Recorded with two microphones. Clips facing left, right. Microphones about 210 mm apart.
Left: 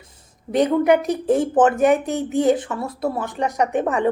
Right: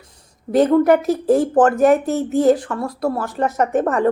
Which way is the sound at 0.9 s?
Centre (ahead or behind).